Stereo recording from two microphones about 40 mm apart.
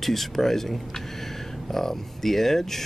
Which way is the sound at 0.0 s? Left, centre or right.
Centre.